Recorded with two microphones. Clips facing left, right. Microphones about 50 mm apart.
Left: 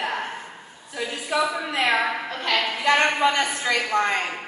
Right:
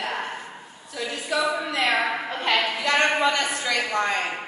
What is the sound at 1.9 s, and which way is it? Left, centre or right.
Speech, centre.